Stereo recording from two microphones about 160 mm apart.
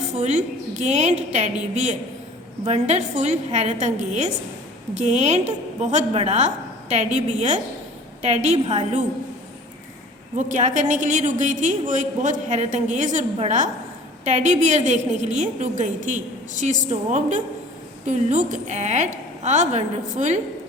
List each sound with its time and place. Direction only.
0.1 s a woman's voice: 45° right (ahead or behind)
10.3 s a woman's voice: 50° right (ahead or behind)